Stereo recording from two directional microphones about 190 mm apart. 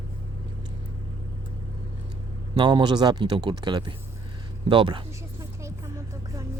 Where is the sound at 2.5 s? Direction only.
25° right (ahead or behind).